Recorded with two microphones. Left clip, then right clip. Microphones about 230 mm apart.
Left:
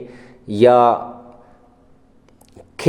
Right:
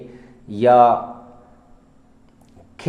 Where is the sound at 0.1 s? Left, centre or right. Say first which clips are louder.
Left 6 dB; left.